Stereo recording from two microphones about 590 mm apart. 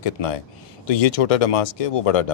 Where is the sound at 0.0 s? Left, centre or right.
Left.